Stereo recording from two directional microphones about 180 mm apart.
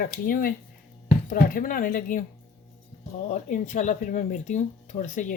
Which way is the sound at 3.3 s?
45° left (ahead or behind).